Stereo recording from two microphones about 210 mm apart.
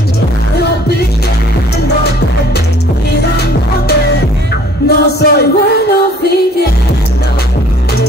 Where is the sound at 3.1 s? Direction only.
50° left (ahead or behind).